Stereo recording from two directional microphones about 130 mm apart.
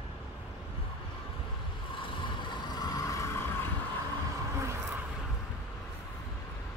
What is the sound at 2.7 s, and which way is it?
Vehicle, 30° left (ahead or behind).